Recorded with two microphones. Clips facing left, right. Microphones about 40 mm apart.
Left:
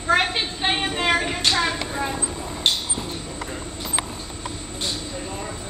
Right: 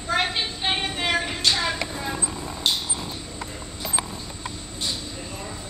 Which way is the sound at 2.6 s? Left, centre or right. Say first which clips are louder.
Left 2 dB; left.